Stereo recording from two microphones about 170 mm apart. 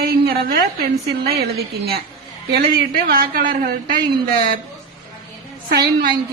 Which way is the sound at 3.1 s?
60° right (ahead or behind).